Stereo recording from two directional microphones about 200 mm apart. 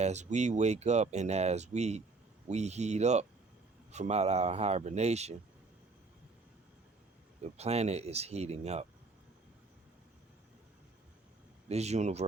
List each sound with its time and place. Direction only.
0.0 s speech: 35° right (ahead or behind)
7.5 s speech: 30° right (ahead or behind)
11.7 s speech: 35° right (ahead or behind)